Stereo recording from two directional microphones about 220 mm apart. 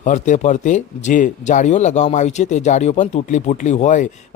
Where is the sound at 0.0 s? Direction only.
35° left (ahead or behind).